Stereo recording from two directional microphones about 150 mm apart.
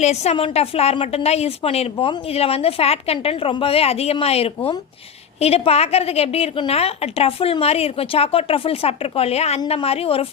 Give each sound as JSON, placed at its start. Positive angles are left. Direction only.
{"t": 0.0, "sound": "a woman's voice", "side_deg": 45}